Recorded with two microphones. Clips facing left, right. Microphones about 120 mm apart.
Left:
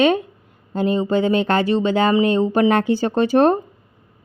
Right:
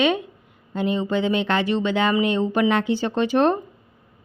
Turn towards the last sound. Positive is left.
turn(degrees=40)  # may be behind; listen again after turning